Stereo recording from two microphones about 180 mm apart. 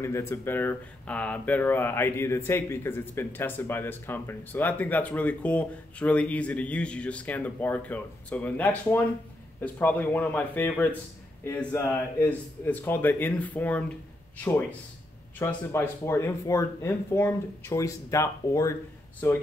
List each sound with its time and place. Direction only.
0.0 s speech: 15° left (ahead or behind)
15.3 s speech: 10° left (ahead or behind)